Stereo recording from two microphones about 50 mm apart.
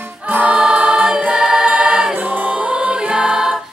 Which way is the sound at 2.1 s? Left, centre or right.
Right.